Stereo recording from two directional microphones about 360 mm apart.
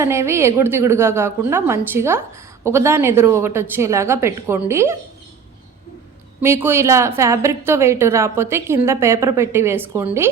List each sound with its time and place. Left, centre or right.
0.0 s a woman's voice: centre
6.4 s a woman's voice: centre